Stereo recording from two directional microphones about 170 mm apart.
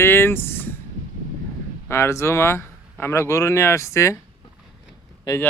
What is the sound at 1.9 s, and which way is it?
Speech, 15° left (ahead or behind).